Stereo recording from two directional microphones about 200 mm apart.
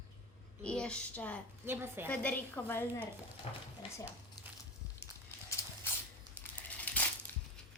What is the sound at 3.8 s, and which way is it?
Speech, 25° left (ahead or behind).